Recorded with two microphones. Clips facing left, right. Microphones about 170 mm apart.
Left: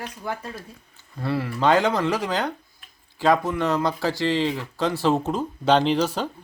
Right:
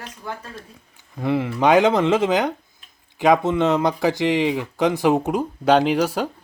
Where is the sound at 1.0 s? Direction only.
15° right (ahead or behind).